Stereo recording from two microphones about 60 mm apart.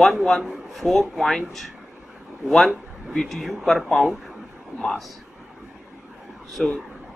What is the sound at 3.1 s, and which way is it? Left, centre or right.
Speech, centre.